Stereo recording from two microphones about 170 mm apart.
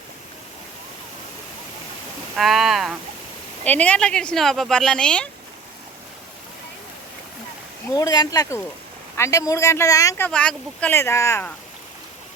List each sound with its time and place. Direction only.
2.3 s speech: centre (ahead or behind)
7.9 s speech: 25° left (ahead or behind)